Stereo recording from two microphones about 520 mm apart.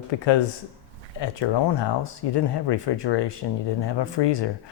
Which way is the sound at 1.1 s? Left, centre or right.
Left.